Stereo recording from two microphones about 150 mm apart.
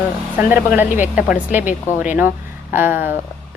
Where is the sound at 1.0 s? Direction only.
10° right (ahead or behind).